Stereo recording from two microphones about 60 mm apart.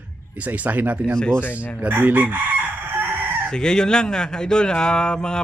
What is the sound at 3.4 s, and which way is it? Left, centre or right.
Speech, centre.